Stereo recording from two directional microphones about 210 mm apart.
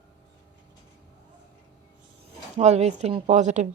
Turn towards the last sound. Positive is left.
turn(degrees=-35)  # may be behind; listen again after turning